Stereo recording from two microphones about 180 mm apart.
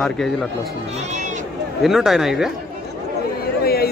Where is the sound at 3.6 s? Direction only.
60° left (ahead or behind).